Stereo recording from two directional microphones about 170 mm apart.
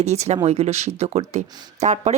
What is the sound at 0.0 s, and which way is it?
Speech, 40° right (ahead or behind).